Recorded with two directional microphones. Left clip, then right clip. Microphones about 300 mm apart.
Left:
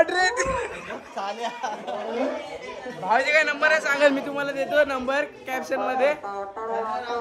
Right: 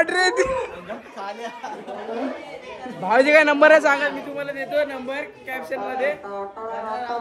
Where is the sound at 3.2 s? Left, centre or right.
Centre.